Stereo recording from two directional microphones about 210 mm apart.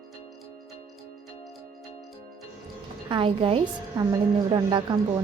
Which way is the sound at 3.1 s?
25° right (ahead or behind).